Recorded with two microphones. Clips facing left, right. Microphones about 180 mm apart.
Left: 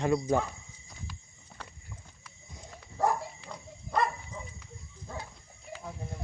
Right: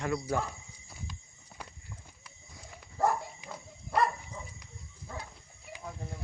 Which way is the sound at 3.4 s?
15° right (ahead or behind).